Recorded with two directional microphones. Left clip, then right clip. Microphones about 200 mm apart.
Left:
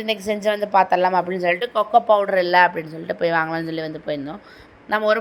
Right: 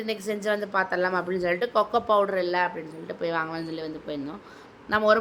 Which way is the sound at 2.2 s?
25° left (ahead or behind).